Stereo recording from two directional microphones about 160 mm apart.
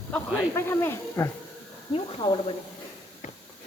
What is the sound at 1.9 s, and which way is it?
Speech, 35° left (ahead or behind).